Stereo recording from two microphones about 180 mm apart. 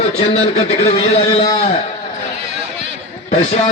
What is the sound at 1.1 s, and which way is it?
Speech, 25° left (ahead or behind).